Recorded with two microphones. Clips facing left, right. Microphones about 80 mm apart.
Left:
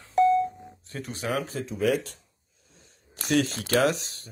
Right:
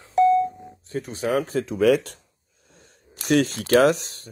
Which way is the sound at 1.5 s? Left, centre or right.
Right.